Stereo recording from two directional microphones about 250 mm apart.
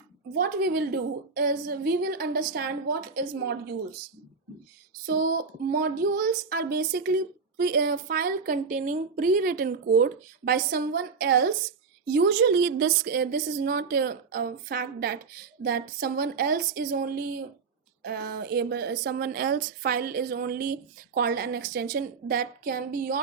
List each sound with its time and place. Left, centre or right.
0.3 s speech: right
5.0 s speech: right